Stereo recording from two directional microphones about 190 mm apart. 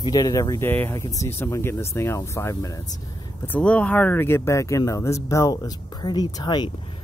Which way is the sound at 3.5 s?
5° left (ahead or behind).